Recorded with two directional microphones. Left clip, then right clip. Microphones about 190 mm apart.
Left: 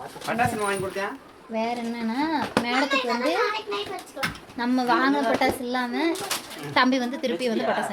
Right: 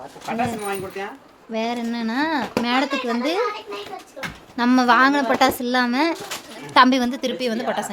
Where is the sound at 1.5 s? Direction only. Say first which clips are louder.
Right 3 dB; 50° right (ahead or behind).